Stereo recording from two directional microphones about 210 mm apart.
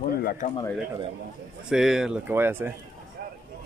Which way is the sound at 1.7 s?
5° right (ahead or behind).